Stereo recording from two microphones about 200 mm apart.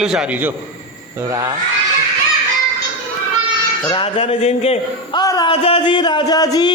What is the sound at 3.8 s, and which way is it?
Speech, 25° left (ahead or behind).